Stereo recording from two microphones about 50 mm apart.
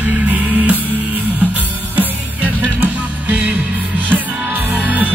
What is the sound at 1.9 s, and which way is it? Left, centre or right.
Music, right.